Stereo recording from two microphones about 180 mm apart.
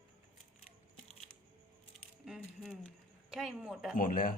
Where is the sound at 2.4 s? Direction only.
5° left (ahead or behind).